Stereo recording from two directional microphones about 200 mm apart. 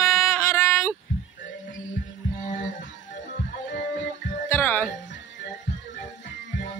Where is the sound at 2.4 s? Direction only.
40° left (ahead or behind).